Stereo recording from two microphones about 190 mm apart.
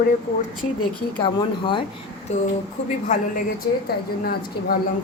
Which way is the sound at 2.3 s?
35° left (ahead or behind).